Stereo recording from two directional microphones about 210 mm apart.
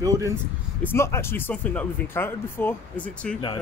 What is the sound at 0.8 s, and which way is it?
Speech, 10° left (ahead or behind).